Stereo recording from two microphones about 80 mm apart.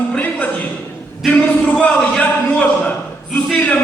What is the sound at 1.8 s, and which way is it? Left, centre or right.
A man's voice, centre.